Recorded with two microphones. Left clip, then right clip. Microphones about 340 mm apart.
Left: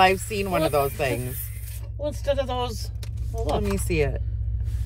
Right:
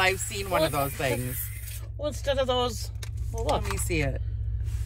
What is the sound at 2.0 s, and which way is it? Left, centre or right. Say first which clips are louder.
Speech: left 1 dB; right.